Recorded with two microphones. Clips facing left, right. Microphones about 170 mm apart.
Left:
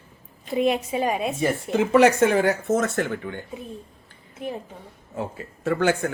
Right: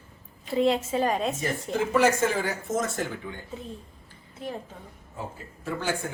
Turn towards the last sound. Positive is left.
turn(degrees=65)  # may be behind; listen again after turning